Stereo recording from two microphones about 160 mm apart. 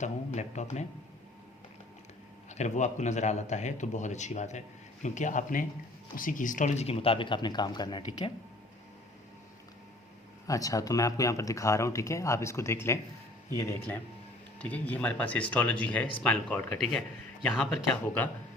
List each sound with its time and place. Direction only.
0.0 s a man's voice: 45° left (ahead or behind)
2.5 s a man's voice: 45° left (ahead or behind); by 8.3 s 30° left (ahead or behind)
10.4 s speech: 20° left (ahead or behind); by 17.0 s 5° left (ahead or behind)